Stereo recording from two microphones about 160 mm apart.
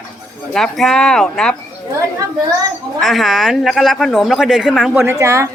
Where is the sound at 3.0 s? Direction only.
Centre (ahead or behind).